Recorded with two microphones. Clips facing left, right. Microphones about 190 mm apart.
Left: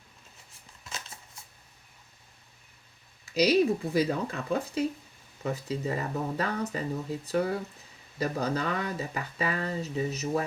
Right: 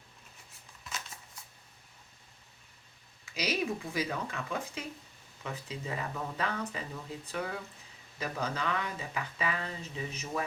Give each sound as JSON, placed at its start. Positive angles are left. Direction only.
{"t": 3.3, "sound": "speech", "side_deg": 35}